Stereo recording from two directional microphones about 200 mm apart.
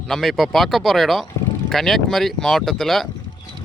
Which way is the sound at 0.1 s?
Centre (ahead or behind).